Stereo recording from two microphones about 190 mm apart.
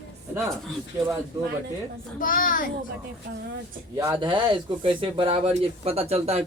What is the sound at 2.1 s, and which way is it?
Speech, 45° left (ahead or behind).